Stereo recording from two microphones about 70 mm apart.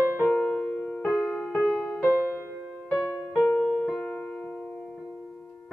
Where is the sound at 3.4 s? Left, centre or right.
Centre.